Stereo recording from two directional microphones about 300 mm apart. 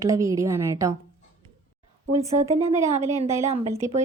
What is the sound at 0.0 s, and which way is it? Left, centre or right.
Speech, centre.